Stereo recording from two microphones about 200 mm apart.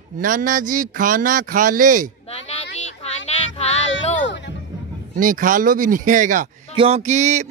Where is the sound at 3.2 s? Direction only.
30° left (ahead or behind).